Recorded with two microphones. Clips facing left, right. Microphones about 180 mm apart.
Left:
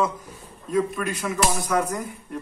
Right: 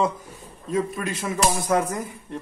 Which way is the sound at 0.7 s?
25° right (ahead or behind).